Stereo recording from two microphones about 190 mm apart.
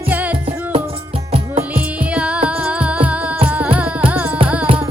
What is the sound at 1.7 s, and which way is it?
Music, 5° right (ahead or behind).